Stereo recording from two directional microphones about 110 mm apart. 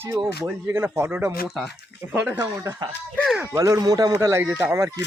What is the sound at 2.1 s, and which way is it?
Speech, 20° right (ahead or behind).